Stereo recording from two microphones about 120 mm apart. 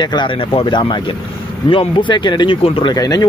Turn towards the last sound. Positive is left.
turn(degrees=30)  # may be behind; listen again after turning